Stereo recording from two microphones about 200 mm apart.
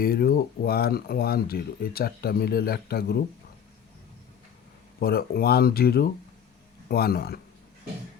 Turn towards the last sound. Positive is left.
turn(degrees=50)  # may be behind; listen again after turning